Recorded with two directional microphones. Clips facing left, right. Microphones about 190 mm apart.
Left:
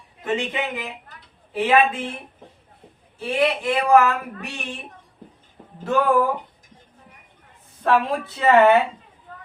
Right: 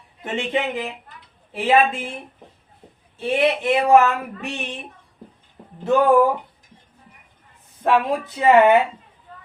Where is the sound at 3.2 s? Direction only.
25° right (ahead or behind).